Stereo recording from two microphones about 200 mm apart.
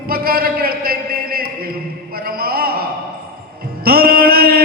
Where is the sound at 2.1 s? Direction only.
50° right (ahead or behind).